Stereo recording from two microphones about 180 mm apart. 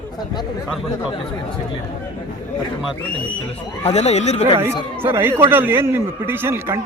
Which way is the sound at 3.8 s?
35° left (ahead or behind).